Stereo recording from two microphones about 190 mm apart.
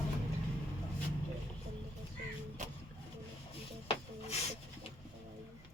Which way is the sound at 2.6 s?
40° right (ahead or behind).